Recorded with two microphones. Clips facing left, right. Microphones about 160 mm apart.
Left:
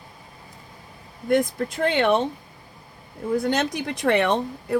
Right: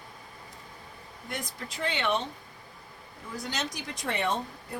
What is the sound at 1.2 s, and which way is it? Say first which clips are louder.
Speech: left 17 dB; 50° left (ahead or behind).